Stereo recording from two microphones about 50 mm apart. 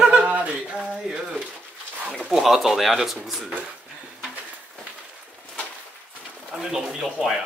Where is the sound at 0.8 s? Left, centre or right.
Centre.